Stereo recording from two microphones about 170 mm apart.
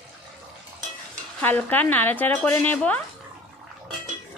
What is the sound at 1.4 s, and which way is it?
Speech, 10° left (ahead or behind).